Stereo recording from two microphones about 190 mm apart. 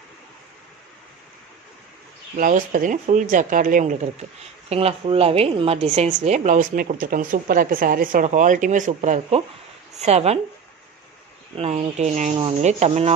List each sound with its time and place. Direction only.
2.3 s a woman's voice: 45° right (ahead or behind)
11.5 s a woman's voice: 35° right (ahead or behind)